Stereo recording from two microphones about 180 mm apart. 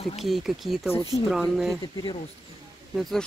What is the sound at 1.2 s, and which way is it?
Speech, centre (ahead or behind).